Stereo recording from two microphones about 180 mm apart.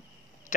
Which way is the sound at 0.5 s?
45° left (ahead or behind).